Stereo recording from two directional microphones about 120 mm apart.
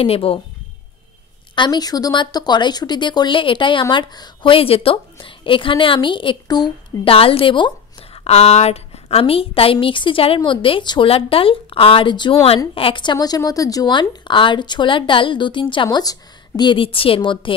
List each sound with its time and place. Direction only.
0.0 s a woman's voice: 50° left (ahead or behind)
1.5 s a woman's voice: 40° left (ahead or behind)
7.1 s a woman's voice: 50° left (ahead or behind)